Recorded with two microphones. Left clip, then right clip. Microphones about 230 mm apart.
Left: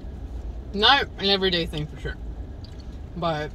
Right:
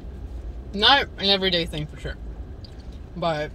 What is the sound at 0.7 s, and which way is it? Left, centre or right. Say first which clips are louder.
Speech: right 1 dB; right.